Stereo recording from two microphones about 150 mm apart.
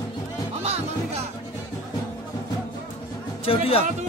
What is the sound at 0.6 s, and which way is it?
Music, 45° right (ahead or behind).